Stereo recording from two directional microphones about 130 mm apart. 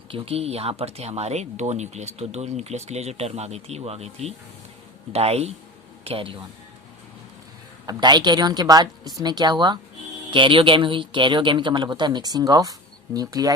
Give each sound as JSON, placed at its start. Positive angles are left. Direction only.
{"t": 0.1, "sound": "speech", "side_deg": -50}
{"t": 7.9, "sound": "speech", "side_deg": -35}